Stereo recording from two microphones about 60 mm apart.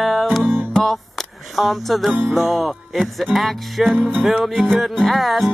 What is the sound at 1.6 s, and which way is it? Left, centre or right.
Speech, centre.